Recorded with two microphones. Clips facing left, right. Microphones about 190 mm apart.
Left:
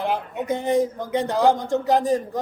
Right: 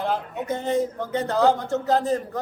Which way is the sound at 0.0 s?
15° left (ahead or behind).